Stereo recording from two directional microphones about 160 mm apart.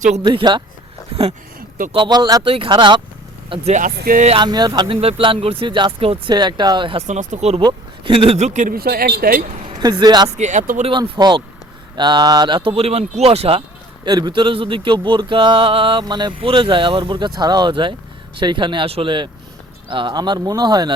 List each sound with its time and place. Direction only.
0.2 s a sound: 30° right (ahead or behind)
1.9 s speech: 30° right (ahead or behind)
3.5 s speech: 45° right (ahead or behind); by 4.3 s 60° right (ahead or behind)
4.3 s a sound: 30° right (ahead or behind)
7.1 s speech: 50° right (ahead or behind)
7.6 s speech: 30° right (ahead or behind); by 9.5 s 70° right (ahead or behind)
9.6 s speech: 25° right (ahead or behind)
10.3 s speech: 50° right (ahead or behind)
11.1 s speech: 30° right (ahead or behind)
11.9 s a sound: 30° right (ahead or behind)
14.0 s a sound: 25° right (ahead or behind)
19.9 s speech: 30° right (ahead or behind)